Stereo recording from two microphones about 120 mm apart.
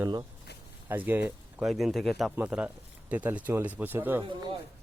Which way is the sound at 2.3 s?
10° right (ahead or behind).